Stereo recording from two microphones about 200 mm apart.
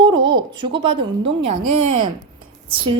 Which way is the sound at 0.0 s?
25° right (ahead or behind).